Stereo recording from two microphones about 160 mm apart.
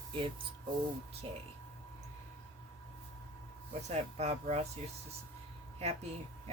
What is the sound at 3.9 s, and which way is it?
Speech, 45° right (ahead or behind).